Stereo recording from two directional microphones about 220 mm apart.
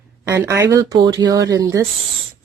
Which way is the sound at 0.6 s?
15° right (ahead or behind).